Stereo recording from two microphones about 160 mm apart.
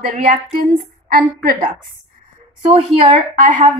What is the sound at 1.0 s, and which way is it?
Speech, 65° right (ahead or behind).